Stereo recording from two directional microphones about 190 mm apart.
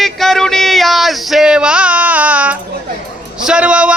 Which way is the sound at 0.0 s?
Centre (ahead or behind).